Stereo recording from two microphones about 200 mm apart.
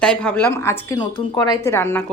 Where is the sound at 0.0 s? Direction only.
5° left (ahead or behind).